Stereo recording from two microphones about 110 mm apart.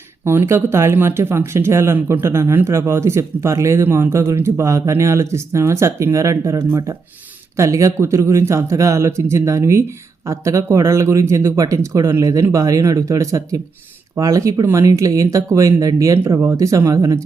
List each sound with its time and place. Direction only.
0.3 s speech: 20° right (ahead or behind)